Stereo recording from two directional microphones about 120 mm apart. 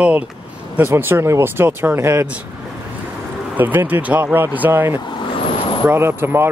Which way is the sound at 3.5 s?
15° right (ahead or behind).